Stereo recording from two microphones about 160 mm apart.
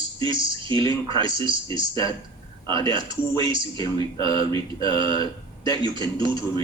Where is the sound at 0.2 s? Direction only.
30° right (ahead or behind).